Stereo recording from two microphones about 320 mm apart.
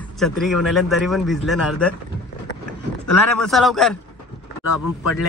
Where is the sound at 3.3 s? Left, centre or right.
Centre.